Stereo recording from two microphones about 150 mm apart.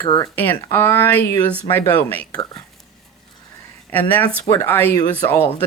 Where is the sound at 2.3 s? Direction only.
25° left (ahead or behind).